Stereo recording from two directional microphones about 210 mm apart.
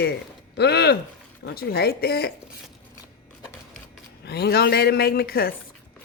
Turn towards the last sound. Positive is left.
turn(degrees=45)  # may be behind; listen again after turning